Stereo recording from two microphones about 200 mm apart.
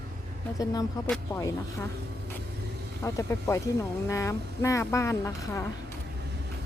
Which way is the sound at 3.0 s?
15° left (ahead or behind).